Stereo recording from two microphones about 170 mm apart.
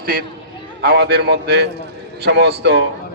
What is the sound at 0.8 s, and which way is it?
A man's voice, 75° right (ahead or behind).